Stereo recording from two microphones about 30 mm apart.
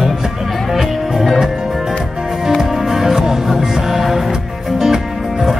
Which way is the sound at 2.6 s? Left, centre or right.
Centre.